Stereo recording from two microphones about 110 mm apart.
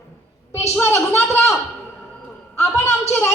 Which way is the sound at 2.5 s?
25° left (ahead or behind).